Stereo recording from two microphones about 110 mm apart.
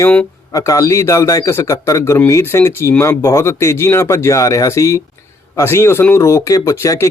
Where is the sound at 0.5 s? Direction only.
30° left (ahead or behind).